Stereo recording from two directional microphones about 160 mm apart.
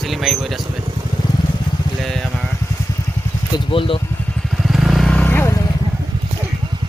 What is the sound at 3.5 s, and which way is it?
Speech, 35° left (ahead or behind).